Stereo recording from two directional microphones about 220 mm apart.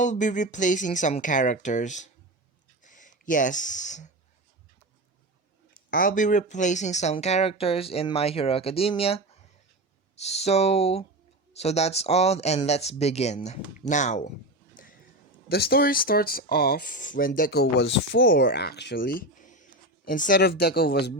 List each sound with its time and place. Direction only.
0.0 s speech: 35° left (ahead or behind)
5.9 s speech: 40° left (ahead or behind)
14.8 s a sound: 35° left (ahead or behind)
15.4 s speech: 45° left (ahead or behind)